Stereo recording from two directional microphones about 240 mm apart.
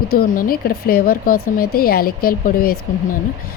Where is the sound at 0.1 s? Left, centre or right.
Left.